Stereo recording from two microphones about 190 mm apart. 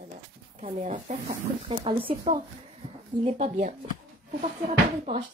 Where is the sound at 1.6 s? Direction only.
25° right (ahead or behind).